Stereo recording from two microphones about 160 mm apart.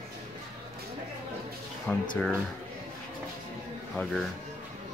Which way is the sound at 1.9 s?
5° left (ahead or behind).